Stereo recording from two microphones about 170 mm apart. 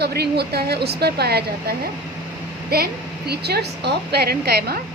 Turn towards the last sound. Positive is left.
turn(degrees=-65)  # may be behind; listen again after turning